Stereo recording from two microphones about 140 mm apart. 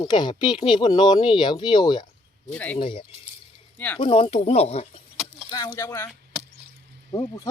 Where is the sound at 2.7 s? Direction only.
35° left (ahead or behind).